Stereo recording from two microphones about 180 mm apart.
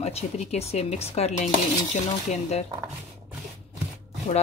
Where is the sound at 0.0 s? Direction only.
35° left (ahead or behind).